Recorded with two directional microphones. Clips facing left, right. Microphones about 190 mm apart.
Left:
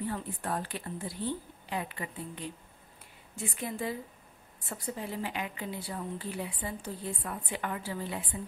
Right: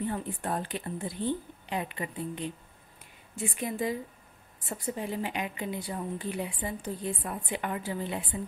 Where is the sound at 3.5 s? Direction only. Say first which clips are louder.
Right 4 dB; 15° right (ahead or behind).